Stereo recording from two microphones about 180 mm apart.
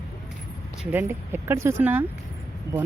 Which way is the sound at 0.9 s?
10° right (ahead or behind).